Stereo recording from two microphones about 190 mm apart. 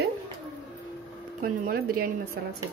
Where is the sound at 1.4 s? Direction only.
50° right (ahead or behind).